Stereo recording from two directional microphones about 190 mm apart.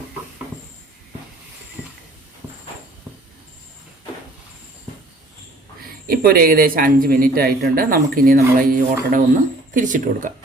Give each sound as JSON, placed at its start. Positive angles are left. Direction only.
{"t": 6.1, "sound": "a man's voice", "side_deg": -50}